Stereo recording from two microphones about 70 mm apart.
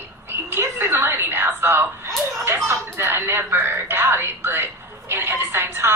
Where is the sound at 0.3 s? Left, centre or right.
Right.